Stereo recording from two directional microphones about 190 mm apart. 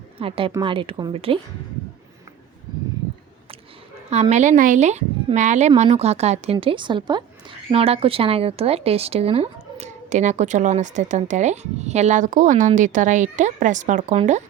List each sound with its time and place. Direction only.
0.2 s speech: 30° right (ahead or behind)
4.1 s speech: 35° right (ahead or behind)